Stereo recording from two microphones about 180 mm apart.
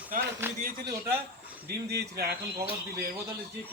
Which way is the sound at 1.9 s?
60° right (ahead or behind).